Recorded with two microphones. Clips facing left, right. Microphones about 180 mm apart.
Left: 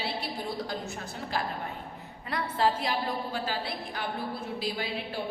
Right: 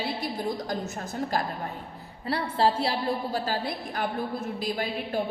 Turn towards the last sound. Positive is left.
turn(degrees=-45)  # may be behind; listen again after turning